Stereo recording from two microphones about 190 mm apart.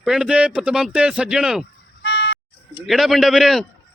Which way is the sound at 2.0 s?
60° left (ahead or behind).